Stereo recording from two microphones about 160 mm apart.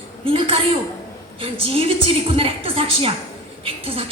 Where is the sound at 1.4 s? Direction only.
35° right (ahead or behind).